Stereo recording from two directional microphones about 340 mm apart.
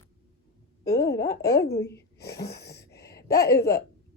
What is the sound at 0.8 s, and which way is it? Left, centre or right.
A woman's voice, centre.